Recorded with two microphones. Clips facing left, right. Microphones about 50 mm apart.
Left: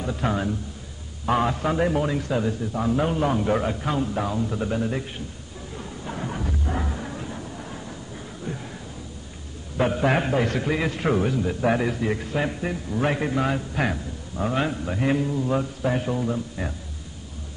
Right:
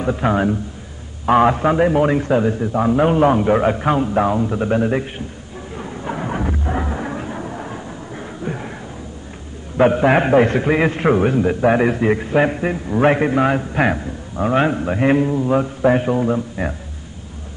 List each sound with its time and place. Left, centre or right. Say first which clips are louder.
0.0 s a man's voice: right 8 dB; right
5.8 s a sound: right 7 dB; right
9.8 s a man's voice: right 8 dB; right